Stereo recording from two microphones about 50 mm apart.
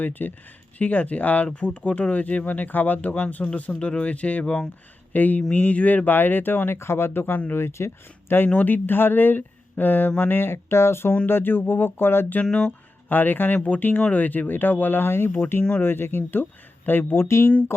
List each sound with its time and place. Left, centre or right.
0.0 s speech: left
5.1 s speech: left
7.6 s speech: left
8.5 s speech: left
11.3 s speech: left
12.5 s speech: left
13.1 s speech: left